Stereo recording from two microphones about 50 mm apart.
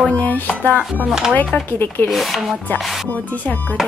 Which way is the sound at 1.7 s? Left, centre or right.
Left.